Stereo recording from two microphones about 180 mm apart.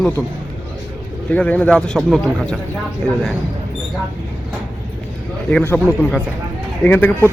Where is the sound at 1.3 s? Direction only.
10° left (ahead or behind).